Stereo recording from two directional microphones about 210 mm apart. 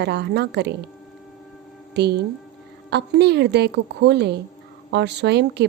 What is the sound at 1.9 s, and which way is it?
A woman's voice, 55° right (ahead or behind).